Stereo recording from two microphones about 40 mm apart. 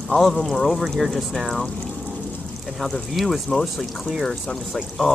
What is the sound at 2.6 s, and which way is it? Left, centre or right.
Speech, centre.